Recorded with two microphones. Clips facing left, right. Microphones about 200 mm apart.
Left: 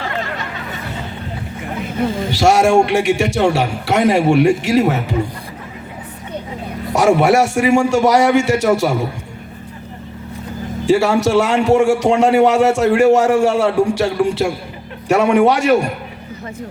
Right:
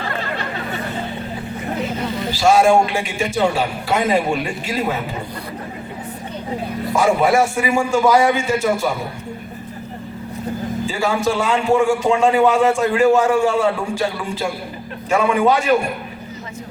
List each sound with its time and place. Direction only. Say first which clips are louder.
2.3 s a man's voice: left 1 dB; 80° left
6.9 s a man's voice: left 3 dB; 80° left
10.8 s a man's voice: left 7 dB; 80° left